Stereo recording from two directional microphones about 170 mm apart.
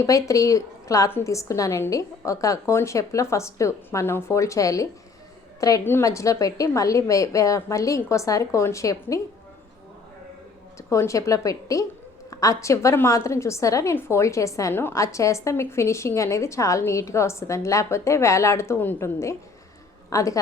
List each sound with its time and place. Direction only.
0.0 s a woman's voice: 20° left (ahead or behind)
10.8 s a woman's voice: 15° left (ahead or behind)